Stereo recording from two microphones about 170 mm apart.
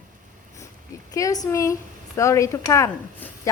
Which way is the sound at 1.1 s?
20° left (ahead or behind).